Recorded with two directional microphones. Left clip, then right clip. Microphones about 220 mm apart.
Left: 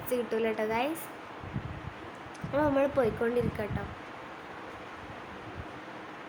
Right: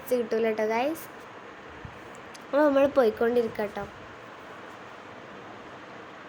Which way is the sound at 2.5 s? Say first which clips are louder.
Right 6 dB; 15° right (ahead or behind).